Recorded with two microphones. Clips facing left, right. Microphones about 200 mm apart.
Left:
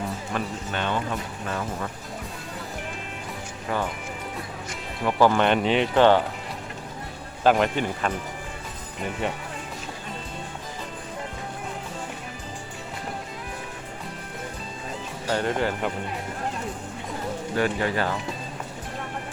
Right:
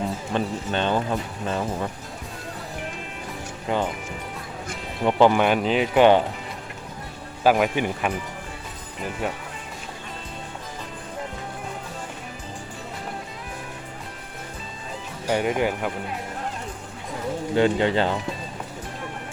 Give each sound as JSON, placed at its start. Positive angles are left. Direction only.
{"t": 0.3, "sound": "speech", "side_deg": -30}
{"t": 3.7, "sound": "speech", "side_deg": -20}
{"t": 5.2, "sound": "speech", "side_deg": -10}
{"t": 7.4, "sound": "speech", "side_deg": -5}
{"t": 15.3, "sound": "speech", "side_deg": -15}
{"t": 17.5, "sound": "speech", "side_deg": -25}